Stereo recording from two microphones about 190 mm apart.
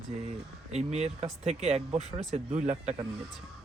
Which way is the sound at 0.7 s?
35° right (ahead or behind).